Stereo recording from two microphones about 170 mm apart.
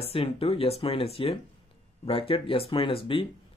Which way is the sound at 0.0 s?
35° left (ahead or behind).